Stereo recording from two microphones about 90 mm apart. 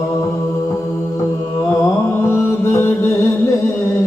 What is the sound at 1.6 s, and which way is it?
Mantra, 30° left (ahead or behind).